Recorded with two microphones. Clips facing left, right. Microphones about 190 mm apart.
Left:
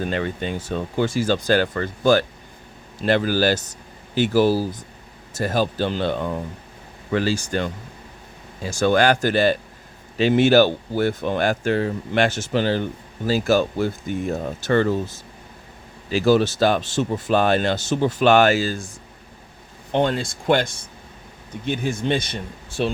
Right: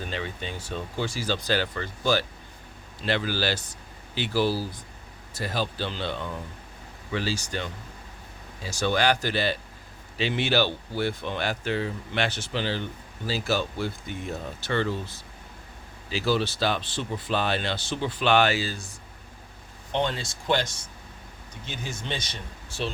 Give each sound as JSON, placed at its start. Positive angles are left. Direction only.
{"t": 0.0, "sound": "speech", "side_deg": 55}
{"t": 19.9, "sound": "speech", "side_deg": 55}